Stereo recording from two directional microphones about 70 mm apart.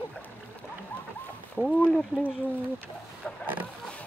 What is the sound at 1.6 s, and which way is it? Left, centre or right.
Speech, centre.